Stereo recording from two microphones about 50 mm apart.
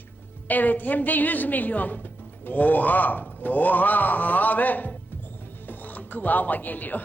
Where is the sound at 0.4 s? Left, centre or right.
Left.